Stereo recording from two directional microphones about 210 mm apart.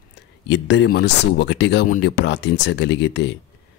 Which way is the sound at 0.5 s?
55° left (ahead or behind).